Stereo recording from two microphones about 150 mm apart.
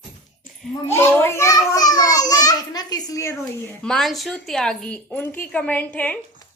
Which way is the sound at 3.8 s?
Centre (ahead or behind).